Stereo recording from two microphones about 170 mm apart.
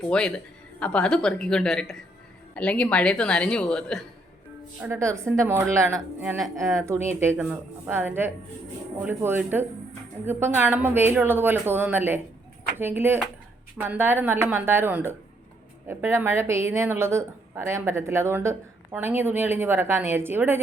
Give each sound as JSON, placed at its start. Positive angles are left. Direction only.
{"t": 0.1, "sound": "speech", "side_deg": 5}
{"t": 4.8, "sound": "speech", "side_deg": -15}